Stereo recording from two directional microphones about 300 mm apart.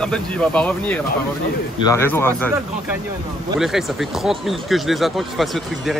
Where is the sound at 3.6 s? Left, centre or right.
Centre.